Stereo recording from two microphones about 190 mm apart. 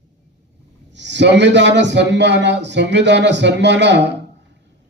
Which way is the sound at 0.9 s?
70° right (ahead or behind).